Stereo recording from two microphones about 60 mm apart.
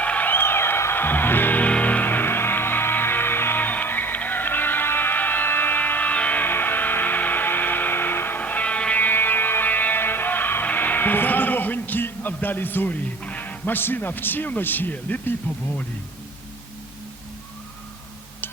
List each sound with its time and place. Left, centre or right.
0.0 s music: left
13.2 s speech: left